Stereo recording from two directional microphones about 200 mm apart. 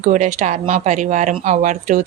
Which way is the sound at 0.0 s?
35° right (ahead or behind).